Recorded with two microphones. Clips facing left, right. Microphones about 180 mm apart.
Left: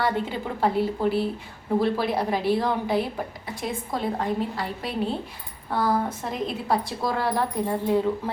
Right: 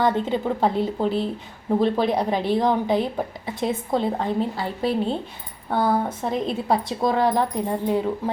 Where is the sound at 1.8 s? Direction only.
20° right (ahead or behind).